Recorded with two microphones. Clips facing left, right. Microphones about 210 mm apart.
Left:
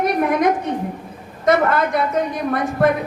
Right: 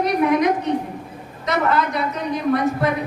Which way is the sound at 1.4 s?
50° left (ahead or behind).